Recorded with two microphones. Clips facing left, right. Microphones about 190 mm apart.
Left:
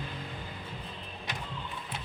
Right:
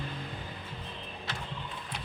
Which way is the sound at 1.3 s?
15° left (ahead or behind).